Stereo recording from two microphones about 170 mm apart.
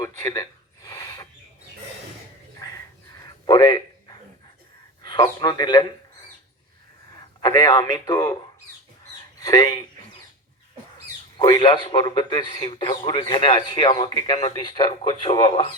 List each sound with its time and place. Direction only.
0.2 s a sound: 20° left (ahead or behind)
2.6 s a sound: 20° left (ahead or behind)
5.2 s a man's voice: 25° left (ahead or behind)
7.4 s a man's voice: 25° left (ahead or behind)
9.4 s speech: 20° left (ahead or behind)
11.3 s a man's voice: 25° left (ahead or behind)